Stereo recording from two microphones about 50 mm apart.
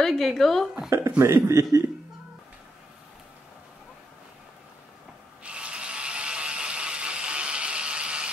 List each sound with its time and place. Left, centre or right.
0.0 s speech: centre
0.8 s speech: right
1.2 s a man's voice: right
5.4 s ratchet: right